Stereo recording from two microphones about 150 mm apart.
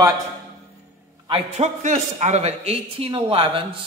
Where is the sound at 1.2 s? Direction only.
40° right (ahead or behind).